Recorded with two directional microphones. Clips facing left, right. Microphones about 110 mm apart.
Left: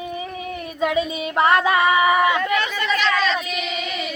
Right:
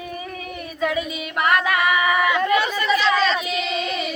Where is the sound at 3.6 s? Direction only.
30° right (ahead or behind).